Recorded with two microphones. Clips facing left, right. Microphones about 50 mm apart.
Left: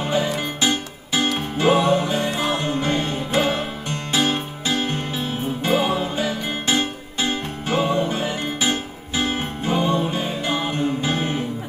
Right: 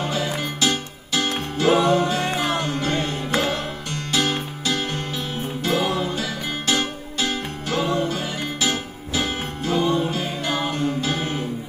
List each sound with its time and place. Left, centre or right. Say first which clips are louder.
0.0 s music: left 3 dB; centre